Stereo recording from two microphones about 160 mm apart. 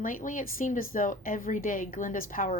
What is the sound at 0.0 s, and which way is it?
A woman's voice, 55° left (ahead or behind).